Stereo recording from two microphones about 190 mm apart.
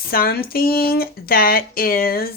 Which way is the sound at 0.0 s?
50° left (ahead or behind).